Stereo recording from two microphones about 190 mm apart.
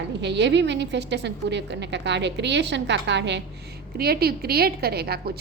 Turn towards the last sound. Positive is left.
turn(degrees=-55)  # may be behind; listen again after turning